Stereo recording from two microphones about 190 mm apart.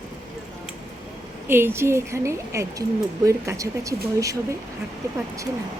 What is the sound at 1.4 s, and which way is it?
A woman's voice, 10° right (ahead or behind).